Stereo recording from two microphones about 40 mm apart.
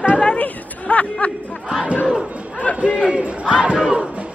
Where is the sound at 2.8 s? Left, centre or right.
Right.